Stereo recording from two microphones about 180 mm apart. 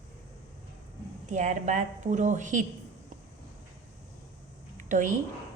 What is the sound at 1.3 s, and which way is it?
Speech, 40° right (ahead or behind).